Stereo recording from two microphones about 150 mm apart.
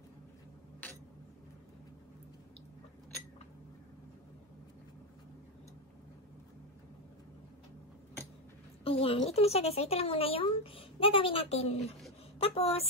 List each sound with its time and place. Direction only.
8.8 s speech: 40° left (ahead or behind)